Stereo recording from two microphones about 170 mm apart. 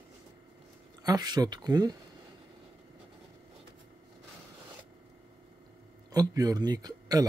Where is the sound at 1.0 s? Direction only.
25° right (ahead or behind).